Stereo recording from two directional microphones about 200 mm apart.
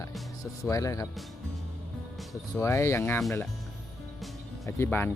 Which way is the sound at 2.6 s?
15° left (ahead or behind).